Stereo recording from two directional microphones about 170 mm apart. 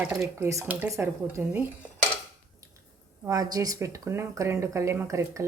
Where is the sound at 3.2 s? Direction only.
20° right (ahead or behind).